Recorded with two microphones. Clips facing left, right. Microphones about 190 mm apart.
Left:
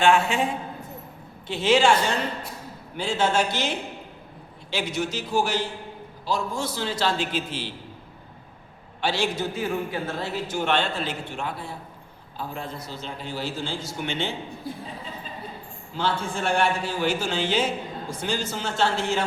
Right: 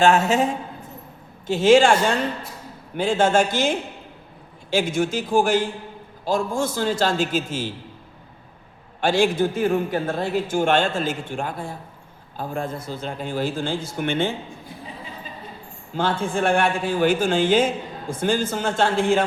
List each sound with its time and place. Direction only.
0.0 s a woman's voice: 40° right (ahead or behind)
9.0 s a man's voice: 50° right (ahead or behind)
16.0 s a man's voice: 50° right (ahead or behind)